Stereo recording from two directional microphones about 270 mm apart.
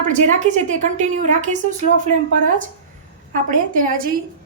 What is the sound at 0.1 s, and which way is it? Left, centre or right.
A woman's voice, right.